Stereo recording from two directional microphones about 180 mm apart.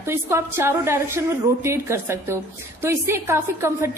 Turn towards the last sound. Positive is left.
turn(degrees=-15)  # may be behind; listen again after turning